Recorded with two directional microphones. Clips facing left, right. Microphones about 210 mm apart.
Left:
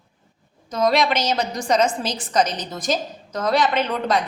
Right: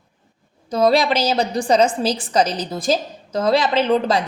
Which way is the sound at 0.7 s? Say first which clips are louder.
Right 3 dB; 30° right (ahead or behind).